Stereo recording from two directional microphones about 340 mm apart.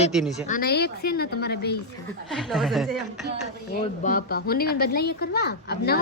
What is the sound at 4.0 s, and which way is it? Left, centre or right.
Speech, left.